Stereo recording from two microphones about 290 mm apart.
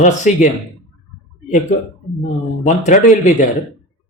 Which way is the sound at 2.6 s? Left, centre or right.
Left.